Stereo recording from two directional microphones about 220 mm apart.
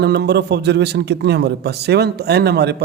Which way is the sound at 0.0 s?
50° right (ahead or behind).